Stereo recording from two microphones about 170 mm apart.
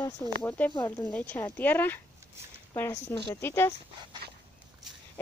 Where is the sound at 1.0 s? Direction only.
10° left (ahead or behind).